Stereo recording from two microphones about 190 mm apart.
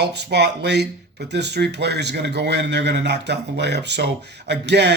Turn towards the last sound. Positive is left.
turn(degrees=-65)  # may be behind; listen again after turning